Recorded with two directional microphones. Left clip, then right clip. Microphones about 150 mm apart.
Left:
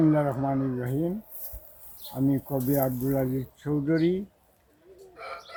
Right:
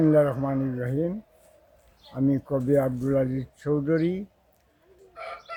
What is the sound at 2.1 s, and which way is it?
Speech, 30° right (ahead or behind).